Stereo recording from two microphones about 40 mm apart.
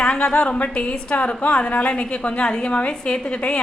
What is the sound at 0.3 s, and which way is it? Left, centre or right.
A woman's voice, left.